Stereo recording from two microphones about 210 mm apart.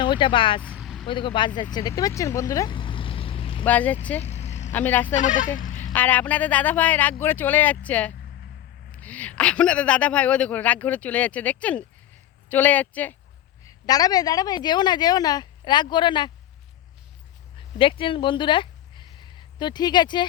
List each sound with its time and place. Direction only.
0.0 s speech: 20° left (ahead or behind)
0.7 s vehicle: centre (ahead or behind)
1.0 s a woman's voice: 25° left (ahead or behind)
1.6 s vehicle: 15° left (ahead or behind)
3.7 s speech: 5° left (ahead or behind)
4.2 s vehicle: 30° left (ahead or behind)
4.7 s speech: 10° left (ahead or behind)
5.0 s speech: 40° left (ahead or behind)
5.6 s a sound: 40° left (ahead or behind)
5.9 s a woman's voice: 5° left (ahead or behind)
17.7 s speech: 25° left (ahead or behind)